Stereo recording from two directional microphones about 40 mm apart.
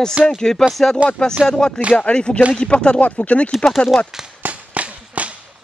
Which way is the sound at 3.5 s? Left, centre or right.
Centre.